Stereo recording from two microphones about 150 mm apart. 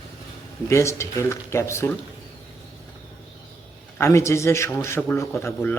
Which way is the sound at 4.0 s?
20° left (ahead or behind).